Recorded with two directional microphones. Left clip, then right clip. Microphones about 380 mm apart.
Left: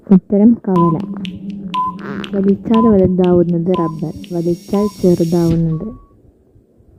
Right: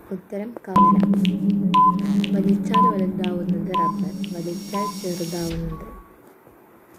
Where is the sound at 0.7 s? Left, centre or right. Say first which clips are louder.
Even; centre.